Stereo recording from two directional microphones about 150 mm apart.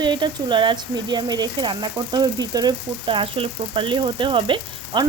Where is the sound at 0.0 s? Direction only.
30° right (ahead or behind).